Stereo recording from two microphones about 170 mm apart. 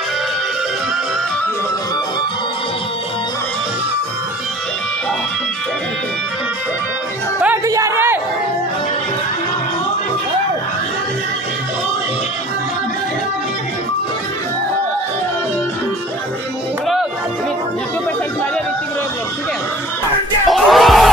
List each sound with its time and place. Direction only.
7.3 s music: 10° right (ahead or behind)
7.6 s a sound: 20° right (ahead or behind)
20.4 s crowd: centre (ahead or behind)